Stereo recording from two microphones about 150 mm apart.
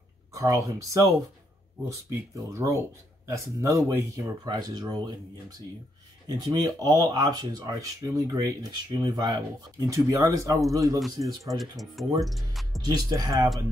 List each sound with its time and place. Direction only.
0.3 s speech: 20° right (ahead or behind)
6.2 s speech: 25° right (ahead or behind)
11.4 s speech: centre (ahead or behind)
12.8 s speech: 25° right (ahead or behind)